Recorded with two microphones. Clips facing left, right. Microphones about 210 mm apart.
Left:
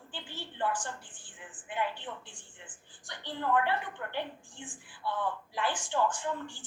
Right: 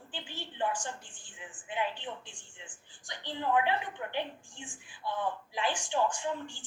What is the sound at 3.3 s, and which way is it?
A woman's voice, 15° right (ahead or behind).